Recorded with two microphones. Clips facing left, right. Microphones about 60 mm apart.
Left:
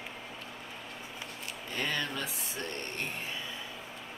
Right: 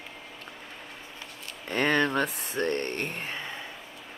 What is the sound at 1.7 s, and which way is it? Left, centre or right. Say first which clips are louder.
Speech: right 10 dB; right.